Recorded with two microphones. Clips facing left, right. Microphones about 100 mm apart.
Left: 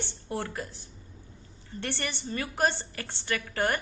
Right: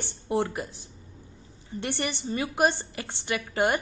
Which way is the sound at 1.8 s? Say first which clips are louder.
Right 4 dB; 15° right (ahead or behind).